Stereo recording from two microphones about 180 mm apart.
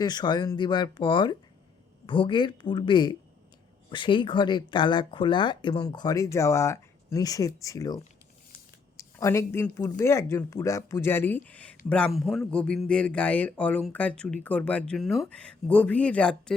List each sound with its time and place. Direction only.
0.0 s speech: 25° left (ahead or behind); by 16.4 s 5° left (ahead or behind)